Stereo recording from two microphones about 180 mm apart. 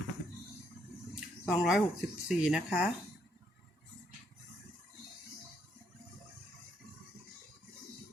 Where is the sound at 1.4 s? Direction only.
Centre (ahead or behind).